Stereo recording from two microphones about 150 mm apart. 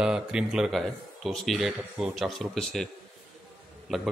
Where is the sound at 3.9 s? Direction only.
Centre (ahead or behind).